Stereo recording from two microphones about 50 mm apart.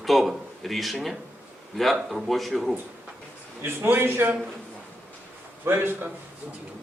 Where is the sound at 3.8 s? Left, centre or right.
Right.